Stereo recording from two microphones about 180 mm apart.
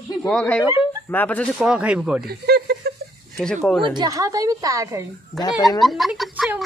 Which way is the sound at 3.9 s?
20° right (ahead or behind).